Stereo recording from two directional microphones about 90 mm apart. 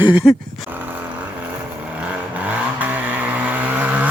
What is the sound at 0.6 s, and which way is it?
Vehicle, 20° right (ahead or behind).